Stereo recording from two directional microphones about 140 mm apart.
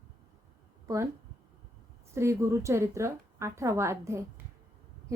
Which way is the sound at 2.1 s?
20° right (ahead or behind).